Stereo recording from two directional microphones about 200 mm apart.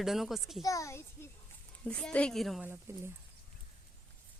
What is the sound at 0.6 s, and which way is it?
A child's voice, 15° left (ahead or behind).